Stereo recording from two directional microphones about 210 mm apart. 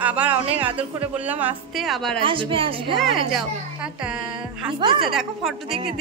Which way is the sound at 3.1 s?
Centre (ahead or behind).